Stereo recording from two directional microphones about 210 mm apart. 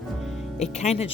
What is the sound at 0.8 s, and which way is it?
Speech, 30° left (ahead or behind).